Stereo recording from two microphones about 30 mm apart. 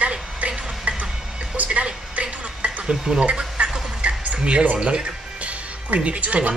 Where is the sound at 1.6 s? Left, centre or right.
Right.